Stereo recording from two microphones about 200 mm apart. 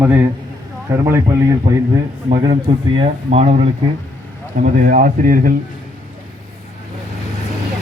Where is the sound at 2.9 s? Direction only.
30° right (ahead or behind).